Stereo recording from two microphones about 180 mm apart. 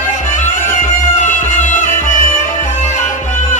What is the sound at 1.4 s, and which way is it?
Music, 45° left (ahead or behind).